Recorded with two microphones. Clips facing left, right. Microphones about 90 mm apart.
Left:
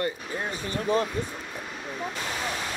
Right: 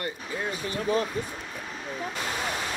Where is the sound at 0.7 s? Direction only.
35° left (ahead or behind).